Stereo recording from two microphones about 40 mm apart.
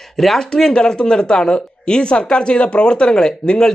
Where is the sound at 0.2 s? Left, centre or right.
Centre.